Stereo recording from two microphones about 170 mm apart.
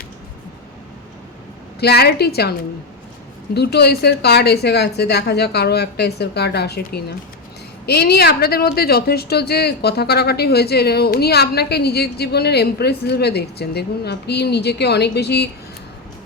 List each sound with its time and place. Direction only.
1.8 s a woman's voice: 70° left (ahead or behind)